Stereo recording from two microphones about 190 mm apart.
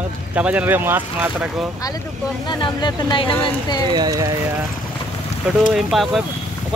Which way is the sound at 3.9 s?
20° right (ahead or behind).